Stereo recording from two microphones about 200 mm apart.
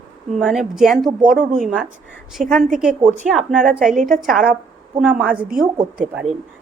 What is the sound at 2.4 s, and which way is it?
Speech, 40° right (ahead or behind).